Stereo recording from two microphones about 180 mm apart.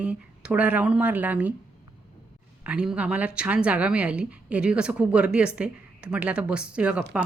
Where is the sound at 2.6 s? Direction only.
5° right (ahead or behind).